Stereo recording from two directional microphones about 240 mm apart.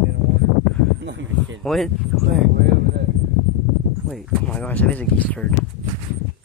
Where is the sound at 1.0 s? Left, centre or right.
Right.